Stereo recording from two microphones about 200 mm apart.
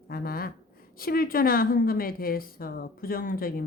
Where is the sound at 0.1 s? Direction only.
45° left (ahead or behind).